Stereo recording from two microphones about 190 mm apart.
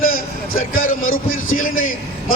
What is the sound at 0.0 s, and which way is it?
Vehicle, 45° left (ahead or behind).